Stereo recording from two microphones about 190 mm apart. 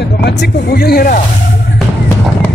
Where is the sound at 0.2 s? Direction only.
60° left (ahead or behind).